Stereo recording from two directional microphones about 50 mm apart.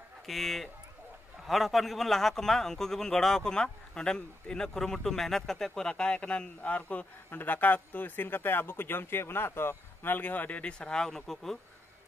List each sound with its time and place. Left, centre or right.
0.3 s a man's voice: centre; by 10.6 s left
10.6 s a man's voice: centre